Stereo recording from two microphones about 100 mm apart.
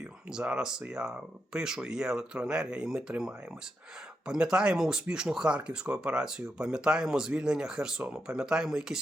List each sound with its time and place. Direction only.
0.3 s speech: 10° right (ahead or behind)